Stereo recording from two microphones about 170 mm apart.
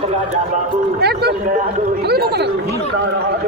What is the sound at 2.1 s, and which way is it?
Chatter, 70° right (ahead or behind).